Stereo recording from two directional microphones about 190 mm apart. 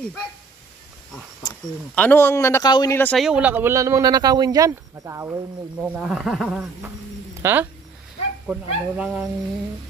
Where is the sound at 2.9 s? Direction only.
10° left (ahead or behind).